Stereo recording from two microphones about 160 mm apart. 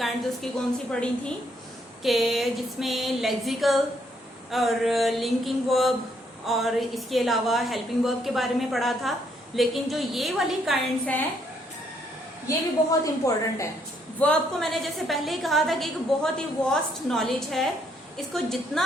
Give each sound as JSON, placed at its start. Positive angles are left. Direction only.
{"t": 0.0, "sound": "a woman's voice", "side_deg": 5}
{"t": 12.5, "sound": "a woman's voice", "side_deg": 20}
{"t": 14.2, "sound": "a woman's voice", "side_deg": 5}